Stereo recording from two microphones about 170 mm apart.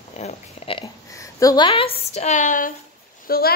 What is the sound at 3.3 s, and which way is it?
Speech, 60° left (ahead or behind).